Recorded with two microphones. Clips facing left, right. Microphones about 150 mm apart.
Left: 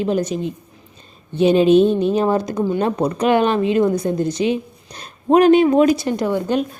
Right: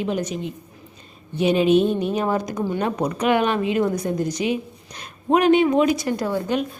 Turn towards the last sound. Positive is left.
turn(degrees=20)  # may be behind; listen again after turning